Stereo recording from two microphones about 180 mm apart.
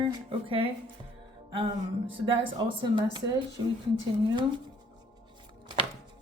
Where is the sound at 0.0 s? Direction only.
30° right (ahead or behind).